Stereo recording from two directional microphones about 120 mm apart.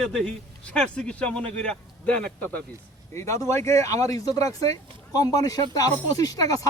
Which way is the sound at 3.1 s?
25° left (ahead or behind).